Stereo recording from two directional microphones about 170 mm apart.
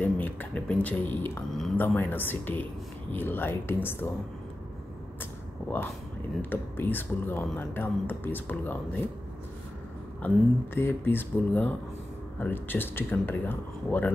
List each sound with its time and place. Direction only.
0.0 s speech: 10° left (ahead or behind)
5.2 s vehicle: 10° left (ahead or behind)
6.5 s speech: 10° left (ahead or behind)
10.2 s speech: 15° left (ahead or behind)